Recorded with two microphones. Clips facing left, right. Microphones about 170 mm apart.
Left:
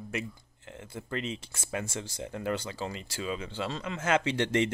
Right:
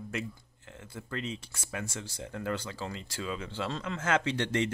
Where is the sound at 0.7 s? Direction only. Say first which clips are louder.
Left 3 dB; 25° left (ahead or behind); by 4.0 s 5° left (ahead or behind).